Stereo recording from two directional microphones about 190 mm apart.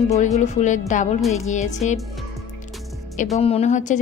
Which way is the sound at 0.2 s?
40° left (ahead or behind).